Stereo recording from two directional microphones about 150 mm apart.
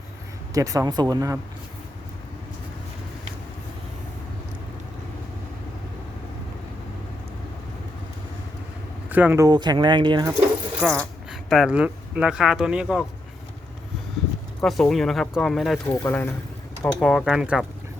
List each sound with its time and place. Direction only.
0.5 s speech: 20° right (ahead or behind)
9.0 s speech: 10° right (ahead or behind)
9.5 s speech: 30° right (ahead or behind)
10.8 s speech: 5° left (ahead or behind)
14.6 s speech: centre (ahead or behind)
15.9 s speech: 15° left (ahead or behind)
17.0 s speech: centre (ahead or behind)